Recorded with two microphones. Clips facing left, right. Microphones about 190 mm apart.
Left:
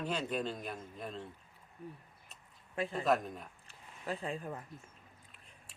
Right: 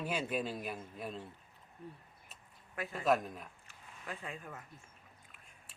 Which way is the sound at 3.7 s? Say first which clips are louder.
Left 8 dB; 30° left (ahead or behind).